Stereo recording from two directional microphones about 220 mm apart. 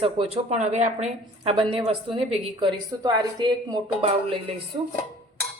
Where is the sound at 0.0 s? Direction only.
25° right (ahead or behind).